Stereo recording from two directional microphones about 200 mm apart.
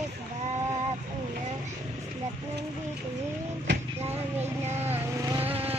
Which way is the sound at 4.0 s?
10° right (ahead or behind).